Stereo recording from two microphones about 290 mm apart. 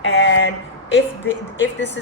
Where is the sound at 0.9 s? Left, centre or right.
Left.